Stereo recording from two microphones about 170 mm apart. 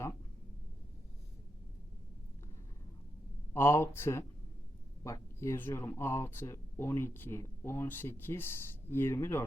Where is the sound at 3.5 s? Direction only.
15° left (ahead or behind).